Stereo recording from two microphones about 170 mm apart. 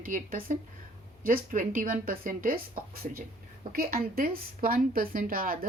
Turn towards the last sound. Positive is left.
turn(degrees=-55)  # may be behind; listen again after turning